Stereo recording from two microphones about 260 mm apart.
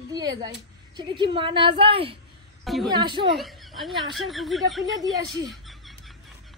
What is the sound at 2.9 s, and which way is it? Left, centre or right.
Speech, centre.